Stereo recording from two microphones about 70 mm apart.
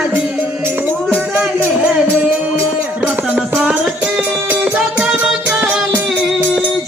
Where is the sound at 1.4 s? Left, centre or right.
Centre.